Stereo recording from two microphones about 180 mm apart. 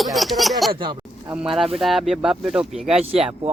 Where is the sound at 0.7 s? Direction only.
25° right (ahead or behind).